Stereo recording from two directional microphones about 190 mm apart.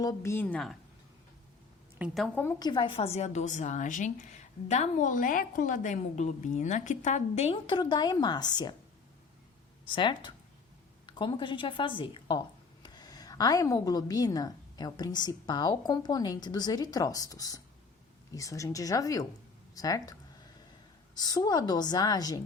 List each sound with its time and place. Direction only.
0.0 s speech: 15° left (ahead or behind)
2.0 s a woman's voice: centre (ahead or behind); by 8.7 s 20° left (ahead or behind)
9.9 s a woman's voice: 25° left (ahead or behind)
21.2 s a woman's voice: 20° left (ahead or behind)